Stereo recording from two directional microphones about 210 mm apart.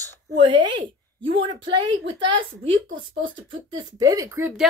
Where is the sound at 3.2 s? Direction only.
65° right (ahead or behind).